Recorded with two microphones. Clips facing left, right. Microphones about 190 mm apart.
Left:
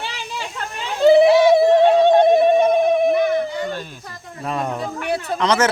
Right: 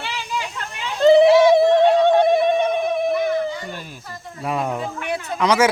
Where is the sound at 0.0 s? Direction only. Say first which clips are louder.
Right 2 dB; 35° left (ahead or behind).